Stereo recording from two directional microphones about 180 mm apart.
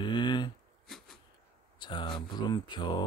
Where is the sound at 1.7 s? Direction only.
25° left (ahead or behind).